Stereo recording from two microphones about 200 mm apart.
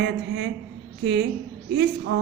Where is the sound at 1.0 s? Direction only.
55° right (ahead or behind).